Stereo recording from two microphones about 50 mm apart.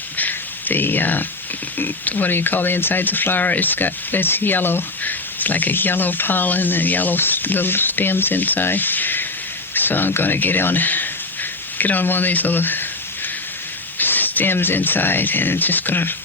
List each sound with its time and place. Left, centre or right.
0.2 s a sound: left
1.8 s speech: left
14.0 s speech: left